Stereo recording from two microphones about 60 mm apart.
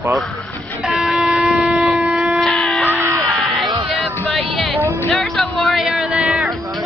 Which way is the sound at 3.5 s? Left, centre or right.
Centre.